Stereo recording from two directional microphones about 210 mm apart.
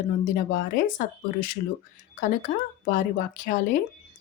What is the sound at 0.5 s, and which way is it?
Speech, 40° left (ahead or behind).